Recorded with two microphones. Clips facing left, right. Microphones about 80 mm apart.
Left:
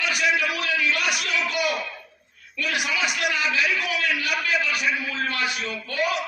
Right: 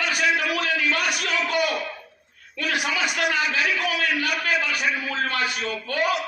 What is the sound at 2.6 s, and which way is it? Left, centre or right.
A man's voice, right.